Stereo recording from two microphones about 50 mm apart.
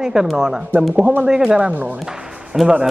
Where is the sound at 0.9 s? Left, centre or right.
Right.